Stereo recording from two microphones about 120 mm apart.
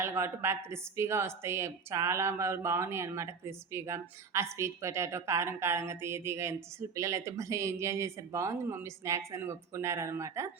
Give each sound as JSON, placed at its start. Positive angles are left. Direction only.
{"t": 0.0, "sound": "speech", "side_deg": -20}